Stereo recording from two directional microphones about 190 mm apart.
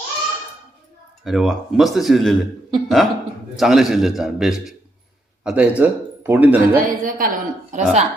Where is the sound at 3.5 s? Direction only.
Centre (ahead or behind).